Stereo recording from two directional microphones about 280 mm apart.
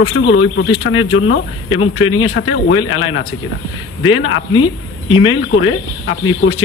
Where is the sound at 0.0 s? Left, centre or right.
Left.